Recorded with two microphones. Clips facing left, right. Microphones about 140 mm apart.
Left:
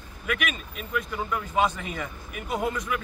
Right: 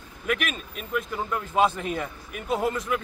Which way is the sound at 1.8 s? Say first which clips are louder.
Right 4 dB; 40° right (ahead or behind).